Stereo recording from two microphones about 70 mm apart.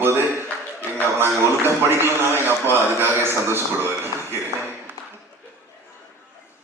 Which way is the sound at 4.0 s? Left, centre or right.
Right.